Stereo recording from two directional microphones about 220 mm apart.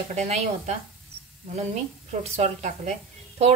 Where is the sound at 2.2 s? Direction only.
30° right (ahead or behind).